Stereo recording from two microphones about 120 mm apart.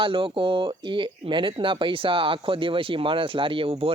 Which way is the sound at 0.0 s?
50° right (ahead or behind).